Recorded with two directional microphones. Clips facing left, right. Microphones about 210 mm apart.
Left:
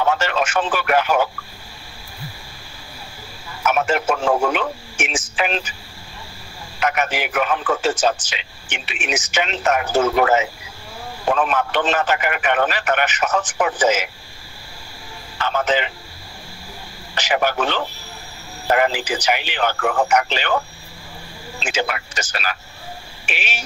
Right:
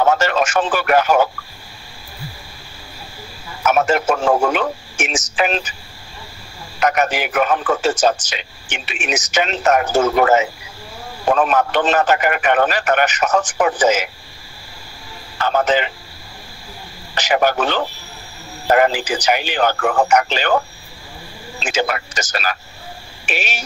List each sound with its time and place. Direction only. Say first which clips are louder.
0.0 s speech: right 4 dB; 45° right (ahead or behind)
3.6 s a man's voice: right 3 dB; 45° right (ahead or behind)
6.8 s a man's voice: right 4 dB; 40° right (ahead or behind)
15.3 s a man's voice: right 3 dB; 40° right (ahead or behind)
17.1 s a man's voice: right 4 dB; 40° right (ahead or behind)
21.6 s speech: right 3 dB; 40° right (ahead or behind)